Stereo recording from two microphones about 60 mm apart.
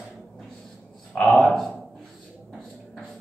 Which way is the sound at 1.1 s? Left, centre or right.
Centre.